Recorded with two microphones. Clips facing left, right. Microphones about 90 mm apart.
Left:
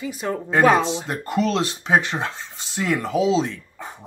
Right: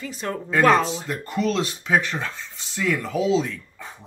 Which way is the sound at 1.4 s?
30° left (ahead or behind).